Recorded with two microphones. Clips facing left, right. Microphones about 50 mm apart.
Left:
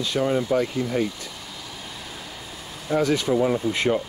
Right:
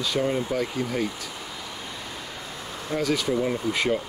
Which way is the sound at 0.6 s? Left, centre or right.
Centre.